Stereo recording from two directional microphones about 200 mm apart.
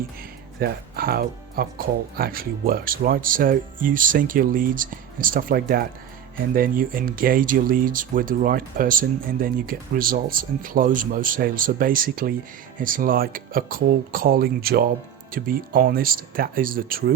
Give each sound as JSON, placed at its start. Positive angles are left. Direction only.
{"t": 0.6, "sound": "speech", "side_deg": -50}